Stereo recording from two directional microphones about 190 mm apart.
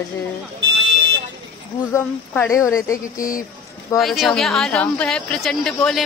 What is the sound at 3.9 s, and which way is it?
A woman's voice, centre (ahead or behind).